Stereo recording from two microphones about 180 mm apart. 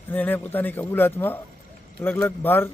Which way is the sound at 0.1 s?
10° left (ahead or behind).